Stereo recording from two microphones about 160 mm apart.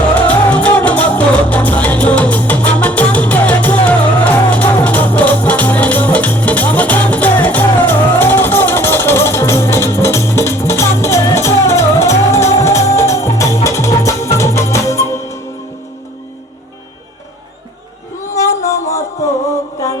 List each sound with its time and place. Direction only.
0.1 s music: 10° left (ahead or behind)
18.3 s music: 20° left (ahead or behind)